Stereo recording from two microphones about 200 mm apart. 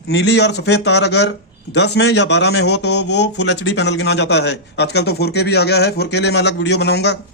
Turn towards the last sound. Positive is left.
turn(degrees=55)  # may be behind; listen again after turning